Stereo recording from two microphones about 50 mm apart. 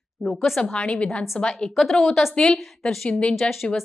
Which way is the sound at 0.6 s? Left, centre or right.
Left.